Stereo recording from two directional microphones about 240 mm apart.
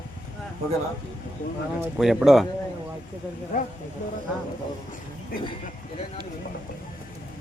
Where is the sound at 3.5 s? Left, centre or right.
Left.